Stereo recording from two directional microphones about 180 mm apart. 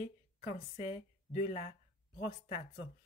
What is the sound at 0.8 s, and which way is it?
Speech, 35° left (ahead or behind).